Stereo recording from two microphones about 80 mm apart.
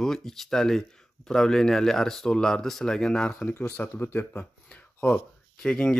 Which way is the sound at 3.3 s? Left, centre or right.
Centre.